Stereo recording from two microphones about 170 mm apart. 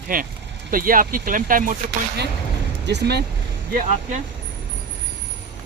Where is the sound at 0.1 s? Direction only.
55° right (ahead or behind).